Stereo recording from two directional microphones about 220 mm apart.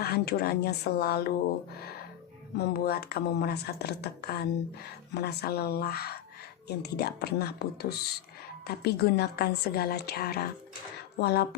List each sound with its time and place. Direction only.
0.0 s speech: 45° left (ahead or behind)
2.6 s speech: 45° left (ahead or behind)